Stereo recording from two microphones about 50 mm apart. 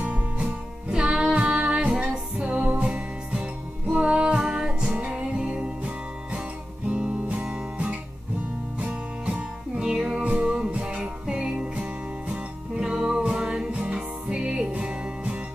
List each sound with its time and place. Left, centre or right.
0.0 s music: right
6.9 s music: right
8.7 s music: right
10.2 s music: right